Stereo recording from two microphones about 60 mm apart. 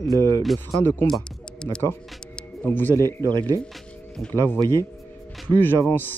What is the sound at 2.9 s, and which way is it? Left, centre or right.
Speech, left.